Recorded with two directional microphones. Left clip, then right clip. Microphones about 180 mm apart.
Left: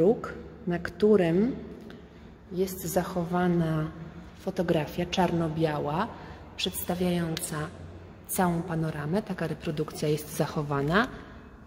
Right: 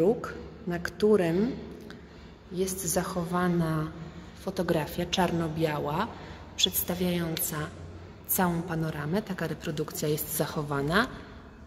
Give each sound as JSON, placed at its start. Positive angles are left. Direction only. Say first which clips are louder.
{"t": 0.0, "sound": "a woman's voice", "louder": "left 2 dB", "side_deg": 35}